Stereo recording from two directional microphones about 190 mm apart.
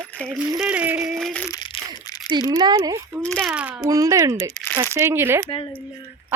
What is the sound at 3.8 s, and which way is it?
A woman's voice, 20° right (ahead or behind).